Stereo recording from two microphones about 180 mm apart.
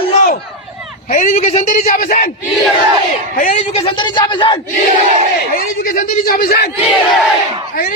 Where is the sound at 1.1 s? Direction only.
45° left (ahead or behind).